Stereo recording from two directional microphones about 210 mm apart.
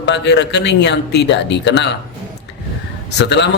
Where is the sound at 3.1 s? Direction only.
55° left (ahead or behind).